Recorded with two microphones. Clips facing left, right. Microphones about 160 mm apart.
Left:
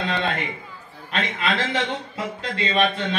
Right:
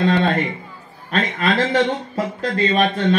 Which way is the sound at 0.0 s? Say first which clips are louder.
Right 8 dB; 40° right (ahead or behind).